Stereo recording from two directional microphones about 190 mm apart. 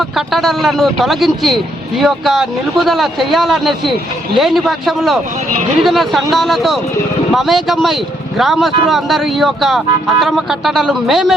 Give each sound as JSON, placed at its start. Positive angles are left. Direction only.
{"t": 0.2, "sound": "speech", "side_deg": 0}